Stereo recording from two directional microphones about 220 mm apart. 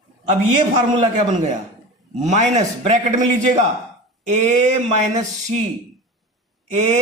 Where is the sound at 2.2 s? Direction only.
35° right (ahead or behind).